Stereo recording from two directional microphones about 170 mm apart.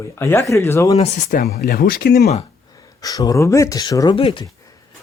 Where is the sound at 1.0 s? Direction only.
40° left (ahead or behind).